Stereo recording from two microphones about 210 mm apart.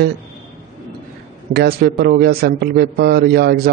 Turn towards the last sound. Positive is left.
turn(degrees=-50)  # may be behind; listen again after turning